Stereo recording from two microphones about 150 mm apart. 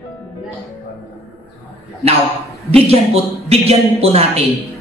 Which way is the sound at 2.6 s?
45° right (ahead or behind).